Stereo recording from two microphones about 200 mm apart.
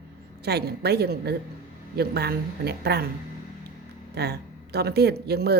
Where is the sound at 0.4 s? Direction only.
55° right (ahead or behind).